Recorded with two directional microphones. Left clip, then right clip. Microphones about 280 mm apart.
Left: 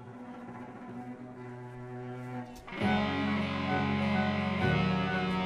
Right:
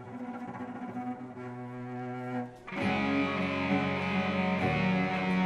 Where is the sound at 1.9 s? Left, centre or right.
Right.